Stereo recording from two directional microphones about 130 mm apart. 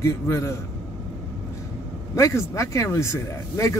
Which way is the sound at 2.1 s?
25° left (ahead or behind).